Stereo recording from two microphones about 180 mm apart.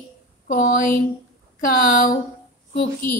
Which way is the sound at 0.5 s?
50° left (ahead or behind).